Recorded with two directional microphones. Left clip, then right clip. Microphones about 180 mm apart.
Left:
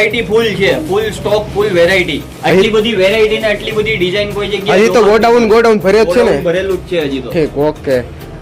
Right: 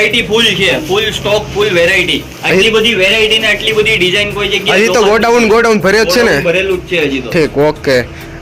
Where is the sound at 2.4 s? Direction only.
15° left (ahead or behind); by 6.5 s 5° right (ahead or behind).